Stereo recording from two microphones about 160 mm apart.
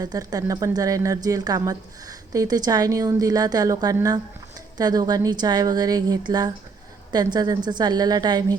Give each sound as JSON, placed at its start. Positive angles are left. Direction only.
{"t": 0.0, "sound": "a woman's voice", "side_deg": -25}